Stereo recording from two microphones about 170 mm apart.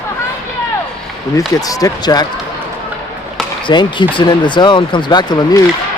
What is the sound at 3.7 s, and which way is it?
Speech, 30° left (ahead or behind).